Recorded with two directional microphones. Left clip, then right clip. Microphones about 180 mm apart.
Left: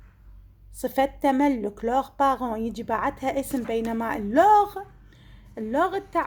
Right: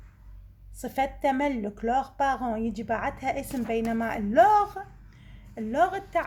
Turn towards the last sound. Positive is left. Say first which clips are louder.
# left 1 dB
turn(degrees=35)  # may be behind; listen again after turning